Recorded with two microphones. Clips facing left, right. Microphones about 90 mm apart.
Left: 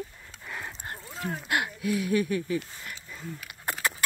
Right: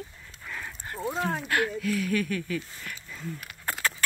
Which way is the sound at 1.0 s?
75° right (ahead or behind).